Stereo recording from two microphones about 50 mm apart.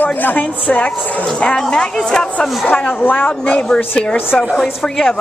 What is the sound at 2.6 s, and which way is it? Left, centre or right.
Speech, left.